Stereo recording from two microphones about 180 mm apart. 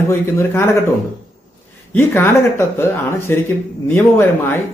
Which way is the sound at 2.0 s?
15° left (ahead or behind).